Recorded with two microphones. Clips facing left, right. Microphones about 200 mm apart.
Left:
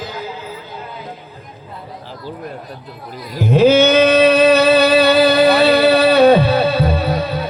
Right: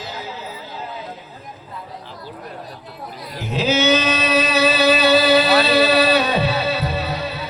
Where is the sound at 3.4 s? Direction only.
55° left (ahead or behind).